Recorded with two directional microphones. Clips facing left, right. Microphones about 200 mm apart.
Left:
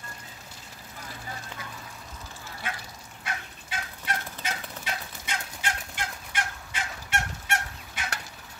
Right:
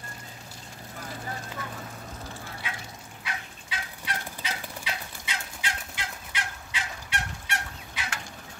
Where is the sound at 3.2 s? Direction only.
50° left (ahead or behind).